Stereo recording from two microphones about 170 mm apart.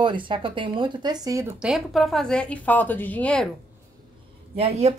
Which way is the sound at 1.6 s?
5° right (ahead or behind).